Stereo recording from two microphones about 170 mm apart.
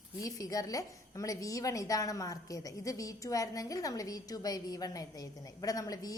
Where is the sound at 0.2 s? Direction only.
20° left (ahead or behind).